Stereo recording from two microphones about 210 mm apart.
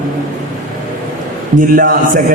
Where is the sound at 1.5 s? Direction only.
40° right (ahead or behind).